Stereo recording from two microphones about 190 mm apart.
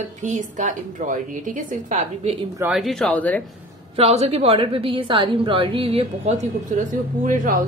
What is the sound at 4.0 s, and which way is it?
A woman's voice, 35° right (ahead or behind).